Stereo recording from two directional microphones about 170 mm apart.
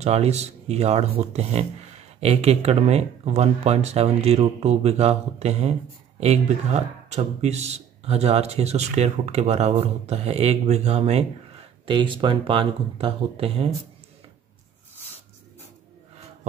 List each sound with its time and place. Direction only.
0.0 s speech: 40° right (ahead or behind)